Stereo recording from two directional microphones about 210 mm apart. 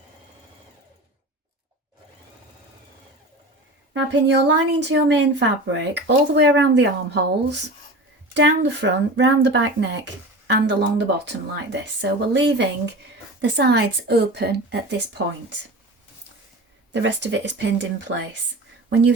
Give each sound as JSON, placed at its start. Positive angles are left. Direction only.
{"t": 3.9, "sound": "a woman's voice", "side_deg": -55}
{"t": 16.9, "sound": "speech", "side_deg": -55}